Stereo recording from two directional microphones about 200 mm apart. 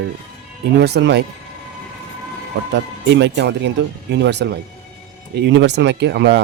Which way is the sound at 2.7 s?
60° right (ahead or behind).